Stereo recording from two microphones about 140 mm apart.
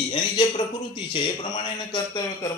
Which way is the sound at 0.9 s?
35° left (ahead or behind).